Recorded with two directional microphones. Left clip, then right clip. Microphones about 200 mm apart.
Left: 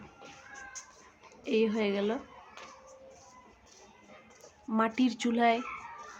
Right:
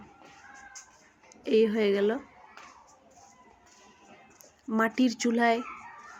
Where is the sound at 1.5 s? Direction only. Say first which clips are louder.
Right 5 dB; 10° right (ahead or behind).